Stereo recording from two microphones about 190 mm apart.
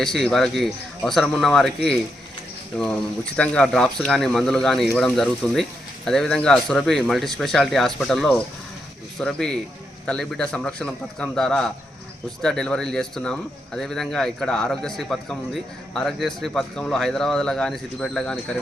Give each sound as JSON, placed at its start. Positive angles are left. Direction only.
{"t": 0.0, "sound": "speech", "side_deg": 0}